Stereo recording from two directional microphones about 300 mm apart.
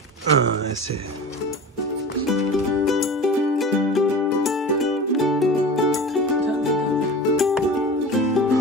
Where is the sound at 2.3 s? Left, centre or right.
Centre.